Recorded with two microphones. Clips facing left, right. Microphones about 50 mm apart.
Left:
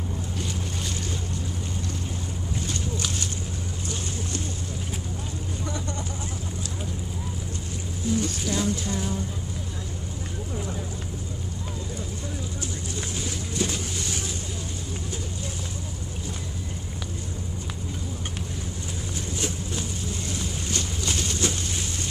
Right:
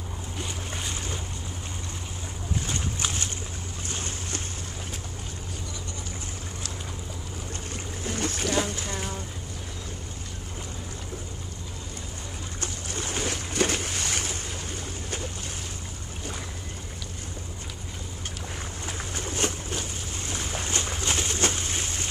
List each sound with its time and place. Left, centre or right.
2.6 s boat: right
8.0 s boat: right
12.5 s boat: right
19.1 s a sound: right
20.2 s boat: right